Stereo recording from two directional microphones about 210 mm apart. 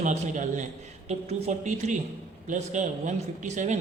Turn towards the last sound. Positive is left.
turn(degrees=-35)  # may be behind; listen again after turning